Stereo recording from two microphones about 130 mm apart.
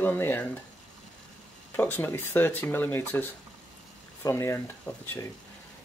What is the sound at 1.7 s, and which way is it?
Speech, 15° left (ahead or behind).